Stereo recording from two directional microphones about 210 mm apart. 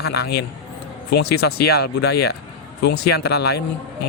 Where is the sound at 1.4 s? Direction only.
50° left (ahead or behind).